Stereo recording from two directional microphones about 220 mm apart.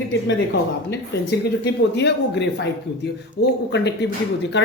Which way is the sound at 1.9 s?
50° left (ahead or behind).